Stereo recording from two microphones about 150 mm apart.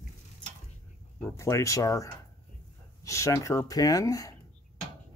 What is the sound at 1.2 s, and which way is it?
Speech, 20° left (ahead or behind).